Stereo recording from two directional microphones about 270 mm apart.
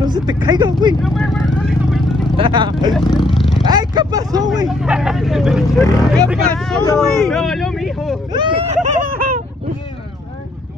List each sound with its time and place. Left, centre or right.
0.0 s speech: centre
1.0 s vehicle: centre
2.3 s speech: centre
3.0 s speech: centre
3.3 s roaring cats: centre
3.6 s speech: centre
4.6 s speech: centre
7.0 s vehicle: centre
8.3 s speech: centre